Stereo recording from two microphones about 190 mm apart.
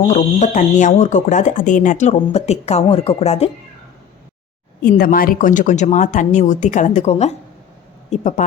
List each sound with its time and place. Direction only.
0.1 s speech: 40° left (ahead or behind)
4.8 s speech: 45° left (ahead or behind)